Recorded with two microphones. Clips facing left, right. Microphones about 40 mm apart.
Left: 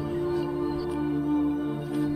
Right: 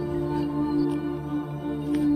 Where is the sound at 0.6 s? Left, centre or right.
Centre.